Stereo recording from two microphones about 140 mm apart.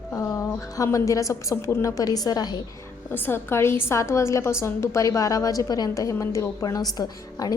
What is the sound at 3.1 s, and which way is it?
A woman's voice, 15° left (ahead or behind).